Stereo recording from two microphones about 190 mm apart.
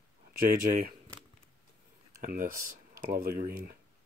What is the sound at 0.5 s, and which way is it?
Speech, 45° right (ahead or behind).